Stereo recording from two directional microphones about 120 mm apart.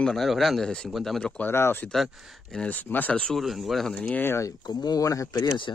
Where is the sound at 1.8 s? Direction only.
5° left (ahead or behind); by 5.7 s 40° left (ahead or behind).